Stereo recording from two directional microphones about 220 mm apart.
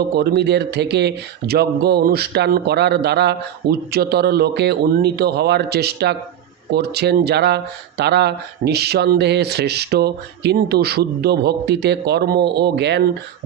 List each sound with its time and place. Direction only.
0.2 s speech: 50° right (ahead or behind)